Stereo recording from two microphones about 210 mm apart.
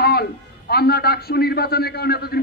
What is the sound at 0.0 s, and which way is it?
A man's voice, 50° left (ahead or behind).